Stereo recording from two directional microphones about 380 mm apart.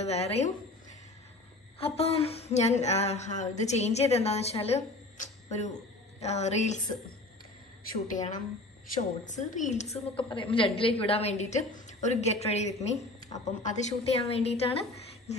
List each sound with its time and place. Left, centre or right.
0.0 s a woman's voice: centre
1.8 s a woman's voice: centre
8.1 s a woman's voice: centre